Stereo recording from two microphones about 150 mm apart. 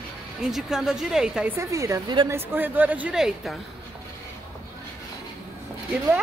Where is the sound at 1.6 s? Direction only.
20° right (ahead or behind); by 3.5 s 5° right (ahead or behind).